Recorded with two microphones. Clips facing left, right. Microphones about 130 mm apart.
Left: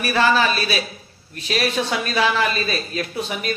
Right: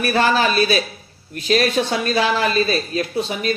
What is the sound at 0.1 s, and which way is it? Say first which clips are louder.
Speech: even; 40° right (ahead or behind).